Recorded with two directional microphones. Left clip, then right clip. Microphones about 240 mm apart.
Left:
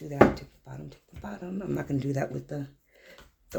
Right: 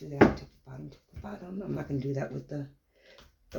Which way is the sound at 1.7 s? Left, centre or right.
Left.